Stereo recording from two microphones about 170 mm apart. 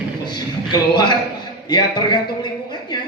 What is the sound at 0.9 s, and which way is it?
A man's voice, 25° left (ahead or behind).